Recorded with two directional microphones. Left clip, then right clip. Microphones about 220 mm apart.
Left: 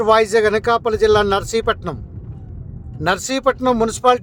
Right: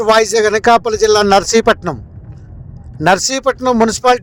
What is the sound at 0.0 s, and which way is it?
Speech, 30° right (ahead or behind).